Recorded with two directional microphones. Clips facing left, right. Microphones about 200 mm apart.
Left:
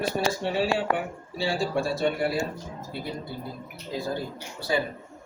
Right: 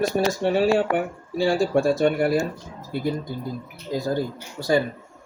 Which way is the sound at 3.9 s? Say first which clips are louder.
Right 5 dB; 40° right (ahead or behind).